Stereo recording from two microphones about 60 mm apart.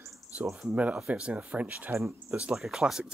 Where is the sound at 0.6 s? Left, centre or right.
Right.